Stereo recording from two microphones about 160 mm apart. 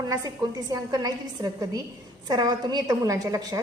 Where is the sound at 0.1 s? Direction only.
25° right (ahead or behind).